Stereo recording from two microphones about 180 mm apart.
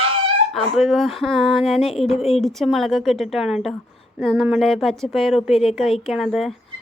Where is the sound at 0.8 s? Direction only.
Centre (ahead or behind).